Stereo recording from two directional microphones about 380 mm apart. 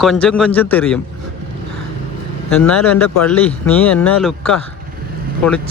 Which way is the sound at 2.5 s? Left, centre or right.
Centre.